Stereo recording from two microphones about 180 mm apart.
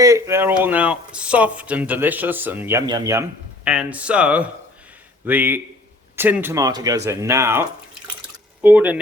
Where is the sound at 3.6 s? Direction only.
5° right (ahead or behind).